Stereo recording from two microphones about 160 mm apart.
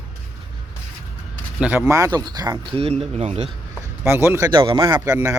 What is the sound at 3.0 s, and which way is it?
Speech, 40° right (ahead or behind).